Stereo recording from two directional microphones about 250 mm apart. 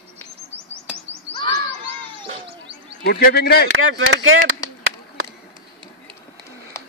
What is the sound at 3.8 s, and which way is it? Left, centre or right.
Speech, right.